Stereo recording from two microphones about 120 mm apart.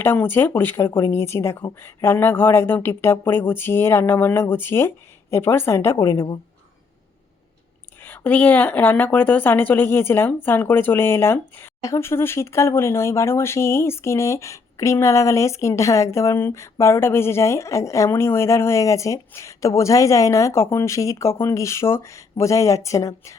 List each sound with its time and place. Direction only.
0.0 s a woman's voice: 15° left (ahead or behind)
8.0 s a woman's voice: 15° left (ahead or behind)